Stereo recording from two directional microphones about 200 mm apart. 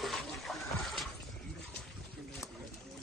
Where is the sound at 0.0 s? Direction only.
Centre (ahead or behind).